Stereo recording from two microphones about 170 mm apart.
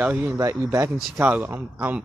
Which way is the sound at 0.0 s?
10° right (ahead or behind).